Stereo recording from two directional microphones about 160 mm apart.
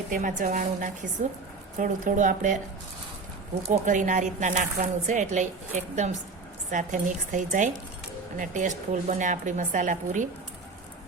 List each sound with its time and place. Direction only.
0.1 s a woman's voice: 55° right (ahead or behind)
3.7 s a woman's voice: 50° right (ahead or behind)